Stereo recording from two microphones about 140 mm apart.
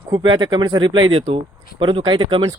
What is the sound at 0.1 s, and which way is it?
Speech, 35° right (ahead or behind).